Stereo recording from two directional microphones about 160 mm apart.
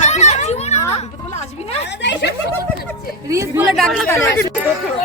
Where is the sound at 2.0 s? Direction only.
90° left.